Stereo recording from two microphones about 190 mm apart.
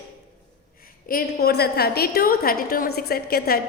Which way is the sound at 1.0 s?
50° left (ahead or behind).